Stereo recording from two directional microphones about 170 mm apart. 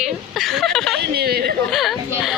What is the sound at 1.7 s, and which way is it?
Speech, centre (ahead or behind).